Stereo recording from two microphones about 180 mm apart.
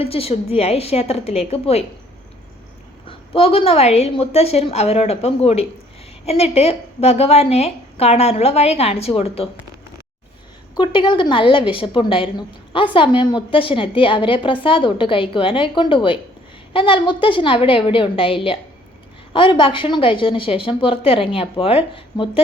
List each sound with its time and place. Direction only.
0.0 s a woman's voice: 30° left (ahead or behind)
3.1 s a woman's voice: 30° left (ahead or behind)
10.8 s a woman's voice: 25° left (ahead or behind)